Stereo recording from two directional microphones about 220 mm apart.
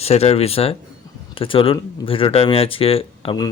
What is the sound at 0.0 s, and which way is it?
Speech, 30° left (ahead or behind).